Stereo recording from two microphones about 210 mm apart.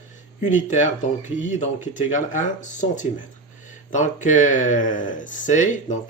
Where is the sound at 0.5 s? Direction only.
35° left (ahead or behind).